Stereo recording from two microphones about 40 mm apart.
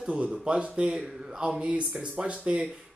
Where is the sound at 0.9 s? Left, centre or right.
Centre.